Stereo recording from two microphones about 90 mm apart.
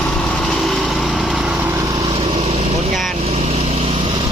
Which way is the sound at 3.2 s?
90° right.